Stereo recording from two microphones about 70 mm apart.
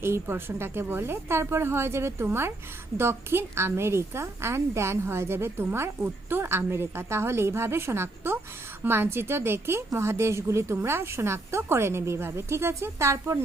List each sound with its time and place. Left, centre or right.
0.0 s a woman's voice: right